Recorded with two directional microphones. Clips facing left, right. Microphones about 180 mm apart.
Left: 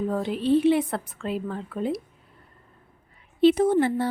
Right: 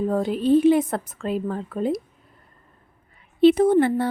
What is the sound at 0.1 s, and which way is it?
Speech, 45° right (ahead or behind).